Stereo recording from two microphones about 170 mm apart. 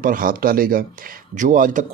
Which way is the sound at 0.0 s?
55° right (ahead or behind).